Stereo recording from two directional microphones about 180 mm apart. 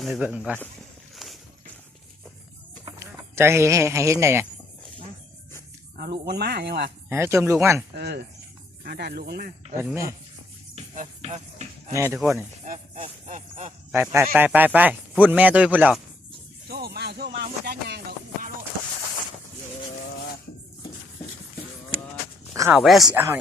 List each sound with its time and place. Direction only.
0.0 s speech: centre (ahead or behind)
1.1 s a sound: centre (ahead or behind)
2.8 s speech: 15° right (ahead or behind)
6.0 s music: 65° right (ahead or behind)
7.1 s speech: 15° right (ahead or behind)
7.9 s music: 65° right (ahead or behind)
9.8 s speech: 15° right (ahead or behind)
10.8 s cricket: 40° right (ahead or behind)
11.9 s speech: 15° right (ahead or behind)
13.2 s a sound: 40° right (ahead or behind)
13.9 s speech: 15° right (ahead or behind)
16.6 s music: 60° right (ahead or behind)
22.7 s speech: centre (ahead or behind)
23.1 s speech: 10° right (ahead or behind)